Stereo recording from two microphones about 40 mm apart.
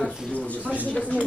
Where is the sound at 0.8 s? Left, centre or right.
Left.